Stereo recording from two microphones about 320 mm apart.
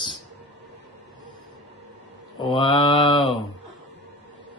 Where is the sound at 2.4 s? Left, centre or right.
Centre.